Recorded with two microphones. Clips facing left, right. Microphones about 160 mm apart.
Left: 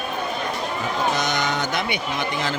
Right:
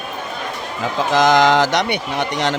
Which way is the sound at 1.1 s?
90° right.